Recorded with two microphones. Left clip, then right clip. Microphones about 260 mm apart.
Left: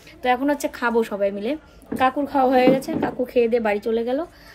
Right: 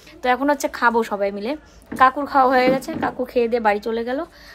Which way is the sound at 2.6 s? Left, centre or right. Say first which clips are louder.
Left 1 dB; right.